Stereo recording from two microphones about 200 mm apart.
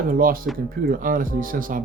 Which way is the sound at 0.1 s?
45° right (ahead or behind).